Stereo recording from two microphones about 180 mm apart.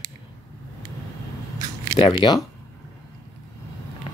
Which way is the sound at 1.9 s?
25° left (ahead or behind).